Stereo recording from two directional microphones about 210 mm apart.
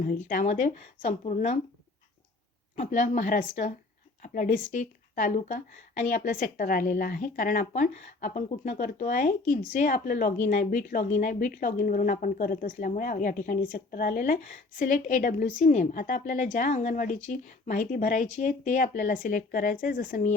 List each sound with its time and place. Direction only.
0.0 s a woman's voice: 40° left (ahead or behind)
2.7 s a woman's voice: 35° left (ahead or behind)